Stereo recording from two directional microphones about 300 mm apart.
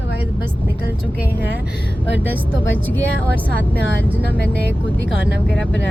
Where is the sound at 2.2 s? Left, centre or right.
Centre.